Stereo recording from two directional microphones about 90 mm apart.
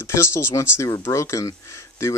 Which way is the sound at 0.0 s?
30° left (ahead or behind).